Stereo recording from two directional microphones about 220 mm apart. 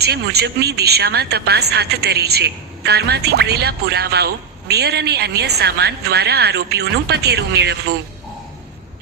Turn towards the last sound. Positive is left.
turn(degrees=-50)  # may be behind; listen again after turning